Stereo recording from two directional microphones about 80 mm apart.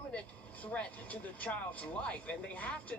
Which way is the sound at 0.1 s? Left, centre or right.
Centre.